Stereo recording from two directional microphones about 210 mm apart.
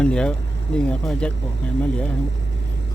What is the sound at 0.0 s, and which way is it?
Speech, 5° left (ahead or behind).